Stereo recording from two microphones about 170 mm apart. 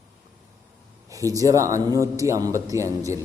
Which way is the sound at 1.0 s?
20° right (ahead or behind).